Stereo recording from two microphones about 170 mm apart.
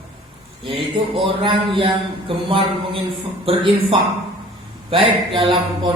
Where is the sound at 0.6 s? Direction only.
30° right (ahead or behind).